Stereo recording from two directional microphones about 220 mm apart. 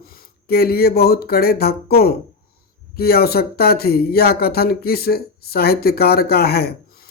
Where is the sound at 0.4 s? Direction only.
45° left (ahead or behind).